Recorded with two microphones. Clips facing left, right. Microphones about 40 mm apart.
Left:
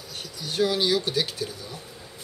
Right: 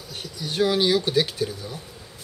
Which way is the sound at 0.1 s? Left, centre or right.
Centre.